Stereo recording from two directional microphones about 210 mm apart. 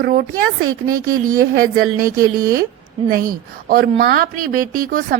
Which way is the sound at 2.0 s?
45° right (ahead or behind).